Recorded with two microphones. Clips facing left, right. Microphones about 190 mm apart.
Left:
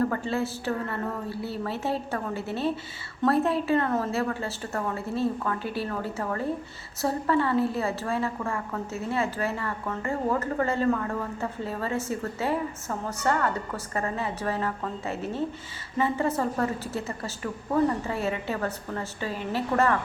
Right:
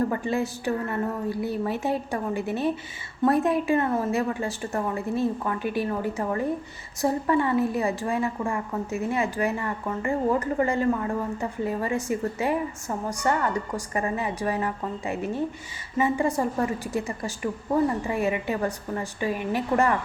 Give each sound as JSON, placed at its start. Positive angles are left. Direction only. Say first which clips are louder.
{"t": 0.0, "sound": "a woman's voice", "louder": "right 1 dB", "side_deg": -15}